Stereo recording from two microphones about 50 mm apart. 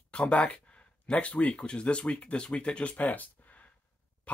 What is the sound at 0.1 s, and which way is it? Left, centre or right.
Speech, left.